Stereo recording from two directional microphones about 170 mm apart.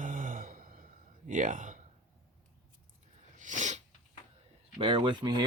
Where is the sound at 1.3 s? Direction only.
50° right (ahead or behind).